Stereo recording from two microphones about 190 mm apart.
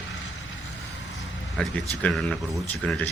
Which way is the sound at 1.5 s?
5° left (ahead or behind).